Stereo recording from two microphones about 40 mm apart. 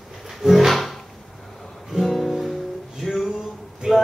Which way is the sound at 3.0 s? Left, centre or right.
Centre.